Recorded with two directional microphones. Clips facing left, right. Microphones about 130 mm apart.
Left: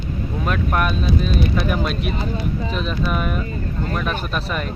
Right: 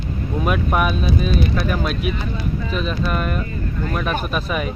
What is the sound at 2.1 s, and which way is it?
Speech, 35° left (ahead or behind).